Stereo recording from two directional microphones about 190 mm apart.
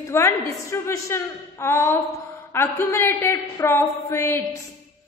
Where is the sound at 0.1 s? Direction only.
15° left (ahead or behind).